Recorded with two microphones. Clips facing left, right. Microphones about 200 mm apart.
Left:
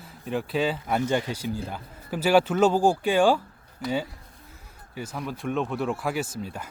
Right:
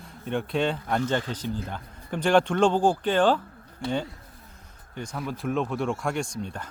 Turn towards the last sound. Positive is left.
turn(degrees=5)  # may be behind; listen again after turning